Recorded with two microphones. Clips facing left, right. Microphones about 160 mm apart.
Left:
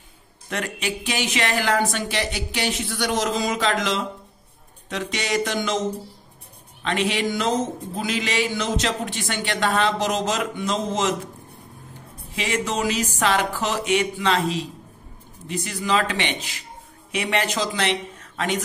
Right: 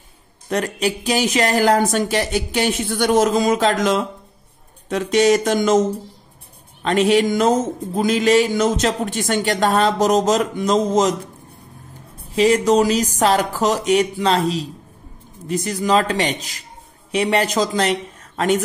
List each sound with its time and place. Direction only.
0.5 s speech: 40° right (ahead or behind)
12.4 s speech: 35° right (ahead or behind)